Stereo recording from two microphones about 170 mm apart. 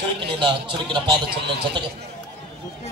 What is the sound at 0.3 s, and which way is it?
A man's voice, 30° right (ahead or behind).